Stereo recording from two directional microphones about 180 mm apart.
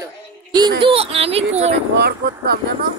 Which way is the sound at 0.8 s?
30° right (ahead or behind).